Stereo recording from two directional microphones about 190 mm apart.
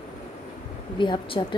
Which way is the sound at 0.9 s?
25° left (ahead or behind).